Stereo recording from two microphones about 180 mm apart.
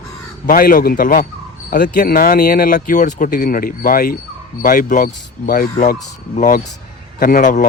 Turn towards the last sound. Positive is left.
turn(degrees=50)  # may be behind; listen again after turning